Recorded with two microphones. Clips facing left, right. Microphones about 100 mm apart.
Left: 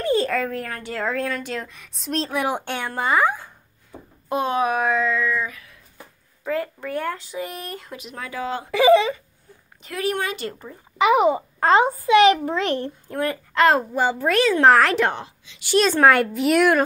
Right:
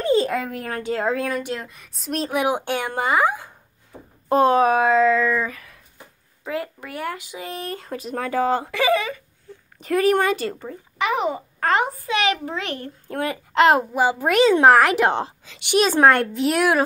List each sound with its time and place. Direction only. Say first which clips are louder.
0.0 s a child's voice: right 1 dB; 20° right (ahead or behind)
1.5 s a child's voice: right 1 dB; 5° right (ahead or behind)
2.1 s a woman's voice: right 2 dB; 15° right (ahead or behind)
4.3 s a sound: right 6 dB; 40° right (ahead or behind)
6.4 s speech: left 3 dB; 15° right (ahead or behind); by 8.6 s 45° right (ahead or behind)
9.8 s speech: right 7 dB; 45° right (ahead or behind)
11.0 s a child's voice: left 6 dB; 20° left (ahead or behind); by 12.9 s 35° left (ahead or behind)
13.1 s a woman's voice: right 1 dB; 20° right (ahead or behind)
15.1 s a woman's voice: right 9 dB; 35° right (ahead or behind)
15.8 s a child's voice: even; 5° right (ahead or behind)